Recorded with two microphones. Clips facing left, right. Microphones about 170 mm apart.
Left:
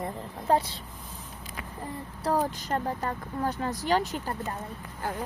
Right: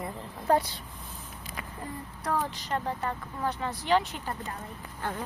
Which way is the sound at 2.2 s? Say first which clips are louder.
Left 4 dB; 40° left (ahead or behind).